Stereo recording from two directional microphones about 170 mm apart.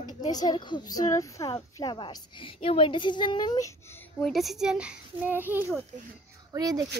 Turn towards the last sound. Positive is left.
turn(degrees=-20)  # may be behind; listen again after turning